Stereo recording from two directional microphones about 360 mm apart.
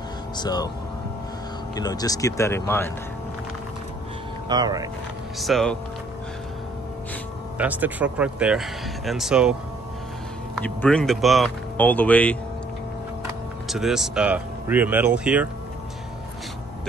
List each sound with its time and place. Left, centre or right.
0.4 s speech: centre
1.8 s speech: centre
4.5 s speech: centre
5.4 s speech: centre
7.5 s speech: centre
13.7 s speech: centre